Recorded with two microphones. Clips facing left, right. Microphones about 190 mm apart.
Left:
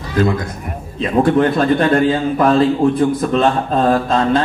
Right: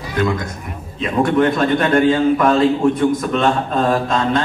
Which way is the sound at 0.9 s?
30° left (ahead or behind).